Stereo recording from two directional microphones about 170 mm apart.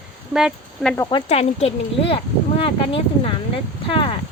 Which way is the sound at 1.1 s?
35° left (ahead or behind).